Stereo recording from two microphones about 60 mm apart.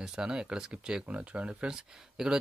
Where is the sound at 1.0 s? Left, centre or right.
Right.